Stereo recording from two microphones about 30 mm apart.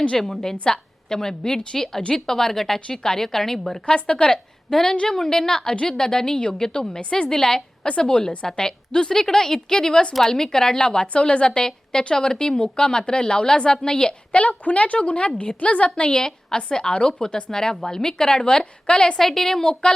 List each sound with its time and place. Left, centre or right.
0.2 s a woman's voice: centre
2.2 s a woman's voice: centre
3.8 s a woman's voice: left
4.7 s a woman's voice: centre
7.8 s a woman's voice: left
11.6 s a woman's voice: left
14.3 s speech: left
15.0 s a woman's voice: left
16.1 s a woman's voice: left
18.4 s a woman's voice: left
19.1 s a woman's voice: centre
19.8 s a woman's voice: left